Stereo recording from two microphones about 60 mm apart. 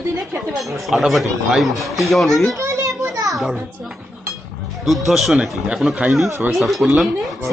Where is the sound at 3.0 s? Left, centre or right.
Right.